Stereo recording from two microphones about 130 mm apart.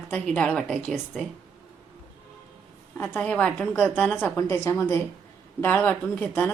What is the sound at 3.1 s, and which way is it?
Speech, 10° left (ahead or behind).